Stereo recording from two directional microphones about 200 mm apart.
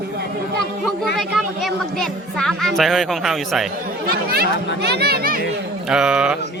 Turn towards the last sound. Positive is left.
turn(degrees=-5)  # may be behind; listen again after turning